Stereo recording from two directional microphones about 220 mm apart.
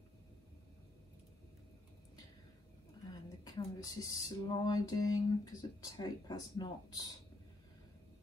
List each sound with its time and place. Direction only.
3.1 s speech: 15° left (ahead or behind)